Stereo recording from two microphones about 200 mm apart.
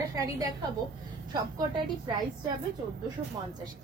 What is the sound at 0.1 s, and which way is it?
A woman's voice, 20° right (ahead or behind).